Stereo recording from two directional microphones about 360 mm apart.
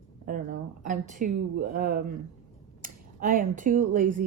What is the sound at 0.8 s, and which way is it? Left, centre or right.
Speech, right.